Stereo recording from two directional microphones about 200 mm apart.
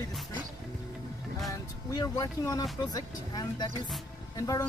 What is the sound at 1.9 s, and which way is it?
Speech, 15° left (ahead or behind).